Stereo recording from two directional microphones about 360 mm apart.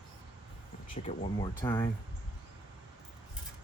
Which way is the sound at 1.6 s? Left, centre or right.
Centre.